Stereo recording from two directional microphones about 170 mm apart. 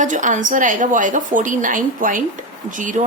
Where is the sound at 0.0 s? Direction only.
50° right (ahead or behind).